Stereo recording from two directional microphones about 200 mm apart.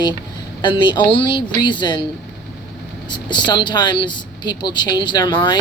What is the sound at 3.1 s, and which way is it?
Speech, 20° left (ahead or behind).